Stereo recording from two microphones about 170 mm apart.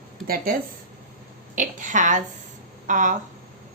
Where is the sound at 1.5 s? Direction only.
50° right (ahead or behind).